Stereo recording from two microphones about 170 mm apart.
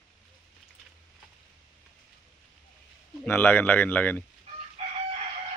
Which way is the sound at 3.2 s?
10° left (ahead or behind).